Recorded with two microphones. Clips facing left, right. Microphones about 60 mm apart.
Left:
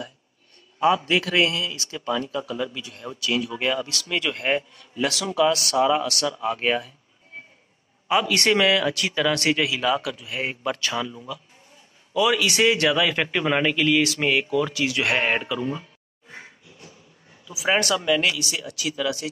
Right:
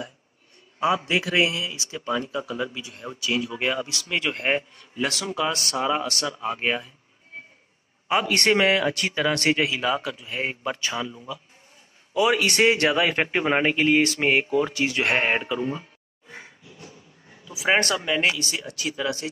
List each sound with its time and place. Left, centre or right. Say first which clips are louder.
1.1 s speech: left 1 dB; right
8.1 s speech: left 1 dB; right
10.8 s speech: left 2 dB; right
12.1 s speech: even; right
17.6 s speech: left 1 dB; right